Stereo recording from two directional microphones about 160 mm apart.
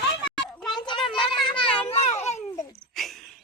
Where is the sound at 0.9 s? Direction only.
30° left (ahead or behind).